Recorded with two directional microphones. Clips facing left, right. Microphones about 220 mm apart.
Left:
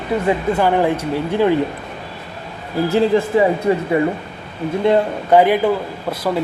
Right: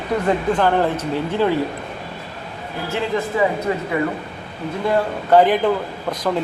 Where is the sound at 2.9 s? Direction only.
35° left (ahead or behind).